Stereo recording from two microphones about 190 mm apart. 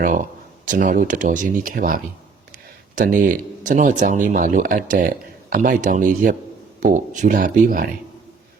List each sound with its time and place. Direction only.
0.7 s speech: 45° right (ahead or behind)